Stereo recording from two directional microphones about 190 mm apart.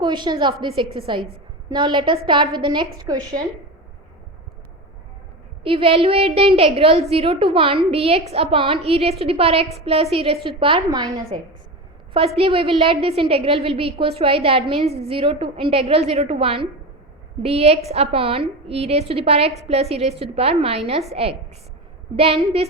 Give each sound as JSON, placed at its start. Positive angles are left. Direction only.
{"t": 0.0, "sound": "a woman's voice", "side_deg": -25}
{"t": 5.6, "sound": "a woman's voice", "side_deg": -30}
{"t": 12.1, "sound": "a woman's voice", "side_deg": -30}